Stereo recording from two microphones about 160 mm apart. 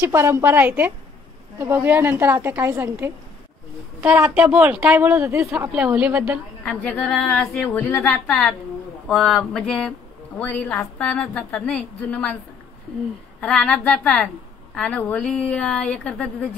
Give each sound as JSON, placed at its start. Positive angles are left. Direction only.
{"t": 0.0, "sound": "speech", "side_deg": -15}
{"t": 5.7, "sound": "speech", "side_deg": -5}
{"t": 6.6, "sound": "a woman's voice", "side_deg": 5}
{"t": 13.4, "sound": "a woman's voice", "side_deg": 5}